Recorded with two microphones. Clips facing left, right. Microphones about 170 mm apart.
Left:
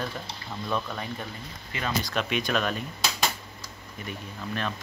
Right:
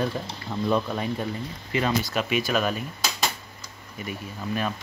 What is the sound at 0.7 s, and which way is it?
Speech, 20° right (ahead or behind).